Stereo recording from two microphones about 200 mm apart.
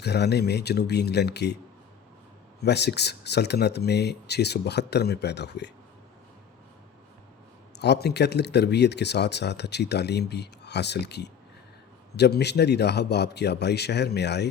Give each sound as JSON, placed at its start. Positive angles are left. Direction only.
{"t": 0.0, "sound": "speech", "side_deg": 55}
{"t": 2.6, "sound": "speech", "side_deg": 55}
{"t": 7.8, "sound": "speech", "side_deg": 55}